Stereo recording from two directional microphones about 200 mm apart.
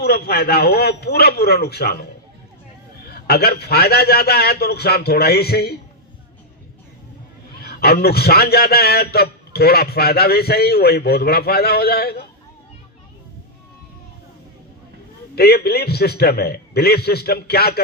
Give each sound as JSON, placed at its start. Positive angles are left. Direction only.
{"t": 0.0, "sound": "a man's voice", "side_deg": 50}
{"t": 3.0, "sound": "a man's voice", "side_deg": 50}
{"t": 7.6, "sound": "a man's voice", "side_deg": 50}
{"t": 15.4, "sound": "a man's voice", "side_deg": 50}